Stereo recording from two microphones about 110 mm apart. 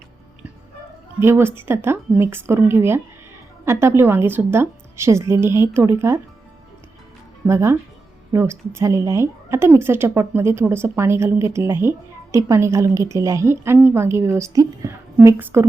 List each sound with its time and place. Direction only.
1.2 s a woman's voice: 20° right (ahead or behind)
7.4 s a woman's voice: 25° right (ahead or behind)